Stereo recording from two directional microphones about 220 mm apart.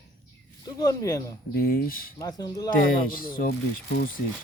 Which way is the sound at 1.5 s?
40° left (ahead or behind).